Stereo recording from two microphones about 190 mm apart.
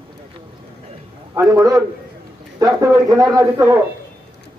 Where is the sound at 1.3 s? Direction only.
15° right (ahead or behind).